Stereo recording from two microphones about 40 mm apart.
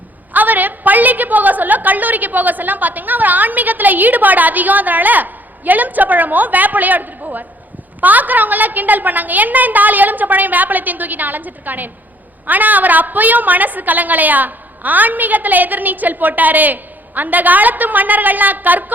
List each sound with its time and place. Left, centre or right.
0.3 s a woman's voice: right